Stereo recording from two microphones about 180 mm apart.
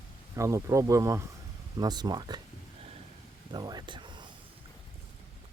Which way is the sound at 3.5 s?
25° right (ahead or behind).